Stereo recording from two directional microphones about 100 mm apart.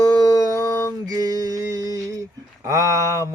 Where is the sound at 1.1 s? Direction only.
40° right (ahead or behind).